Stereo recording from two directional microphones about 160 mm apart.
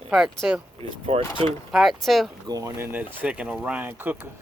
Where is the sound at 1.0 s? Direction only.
40° right (ahead or behind).